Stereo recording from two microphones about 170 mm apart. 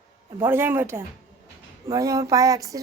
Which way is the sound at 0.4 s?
15° right (ahead or behind).